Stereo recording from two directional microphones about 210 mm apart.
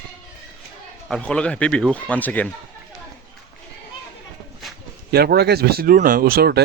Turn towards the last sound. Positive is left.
turn(degrees=-45)  # may be behind; listen again after turning